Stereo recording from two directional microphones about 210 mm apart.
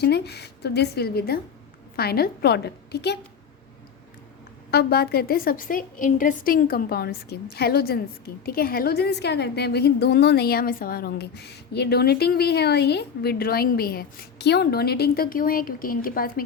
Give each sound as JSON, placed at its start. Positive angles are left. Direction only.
{"t": 0.0, "sound": "a woman's voice", "side_deg": 50}
{"t": 4.7, "sound": "a woman's voice", "side_deg": 50}